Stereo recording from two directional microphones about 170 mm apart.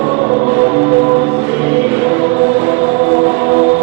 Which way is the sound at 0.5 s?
10° right (ahead or behind).